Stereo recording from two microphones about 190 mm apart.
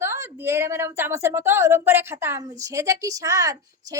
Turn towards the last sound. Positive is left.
turn(degrees=-15)  # may be behind; listen again after turning